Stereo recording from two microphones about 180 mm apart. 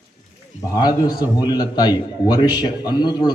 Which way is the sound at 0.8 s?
25° left (ahead or behind).